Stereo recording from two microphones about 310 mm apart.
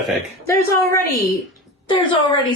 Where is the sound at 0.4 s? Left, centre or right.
Centre.